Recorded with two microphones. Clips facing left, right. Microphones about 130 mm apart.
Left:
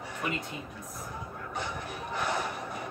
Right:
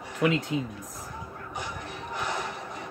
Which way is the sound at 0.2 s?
90° right.